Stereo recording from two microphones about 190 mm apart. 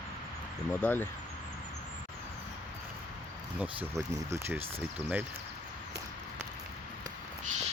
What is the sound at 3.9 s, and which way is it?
Speech, 15° right (ahead or behind).